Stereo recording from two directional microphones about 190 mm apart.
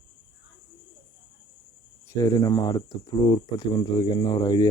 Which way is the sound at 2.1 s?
15° left (ahead or behind).